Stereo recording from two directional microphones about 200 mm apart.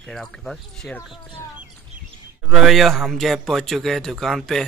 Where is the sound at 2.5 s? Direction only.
Centre (ahead or behind).